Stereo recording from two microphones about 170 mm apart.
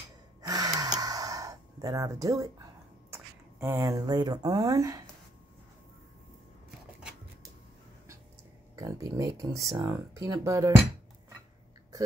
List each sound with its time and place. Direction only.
0.4 s gasp: 20° right (ahead or behind)
3.1 s speech: 15° right (ahead or behind)
8.7 s speech: 20° right (ahead or behind)